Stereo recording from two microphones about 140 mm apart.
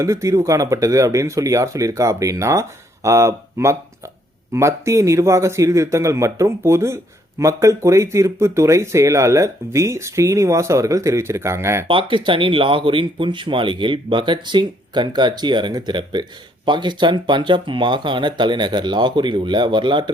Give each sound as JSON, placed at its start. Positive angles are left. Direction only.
{"t": 0.0, "sound": "a man's voice", "side_deg": -20}
{"t": 11.9, "sound": "speech", "side_deg": -35}